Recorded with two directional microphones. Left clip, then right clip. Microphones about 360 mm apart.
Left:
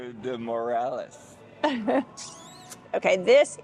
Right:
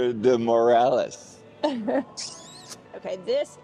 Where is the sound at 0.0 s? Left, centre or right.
Right.